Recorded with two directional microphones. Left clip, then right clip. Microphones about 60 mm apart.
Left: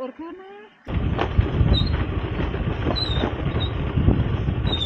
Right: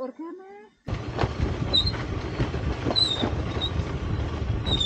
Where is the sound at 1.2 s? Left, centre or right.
Right.